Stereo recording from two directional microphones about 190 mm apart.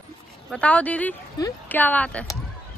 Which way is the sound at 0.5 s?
5° left (ahead or behind).